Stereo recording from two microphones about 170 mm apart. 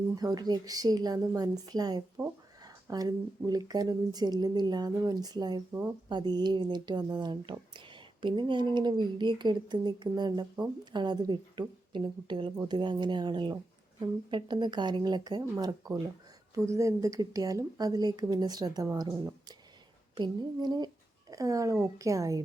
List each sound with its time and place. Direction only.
0.2 s speech: 25° right (ahead or behind)
2.2 s speech: 5° right (ahead or behind)
2.6 s speech: 20° right (ahead or behind)